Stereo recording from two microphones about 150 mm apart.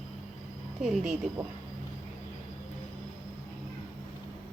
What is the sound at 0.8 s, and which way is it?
Speech, 5° right (ahead or behind).